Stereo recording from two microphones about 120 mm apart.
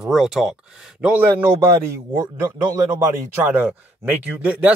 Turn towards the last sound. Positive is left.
turn(degrees=-15)  # may be behind; listen again after turning